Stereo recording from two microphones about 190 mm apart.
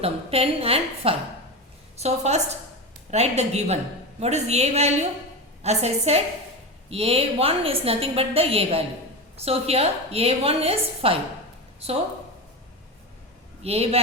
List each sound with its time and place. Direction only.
0.0 s a woman's voice: 30° right (ahead or behind)
13.6 s a woman's voice: 30° right (ahead or behind)